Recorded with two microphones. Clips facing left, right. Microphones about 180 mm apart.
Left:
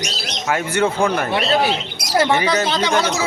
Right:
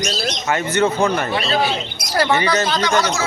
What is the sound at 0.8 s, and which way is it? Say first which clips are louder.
Speech: even; 5° right (ahead or behind).